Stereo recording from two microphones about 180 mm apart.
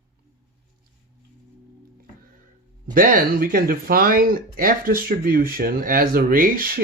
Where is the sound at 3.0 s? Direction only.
50° right (ahead or behind).